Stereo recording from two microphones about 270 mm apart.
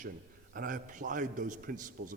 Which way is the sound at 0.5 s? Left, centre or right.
Right.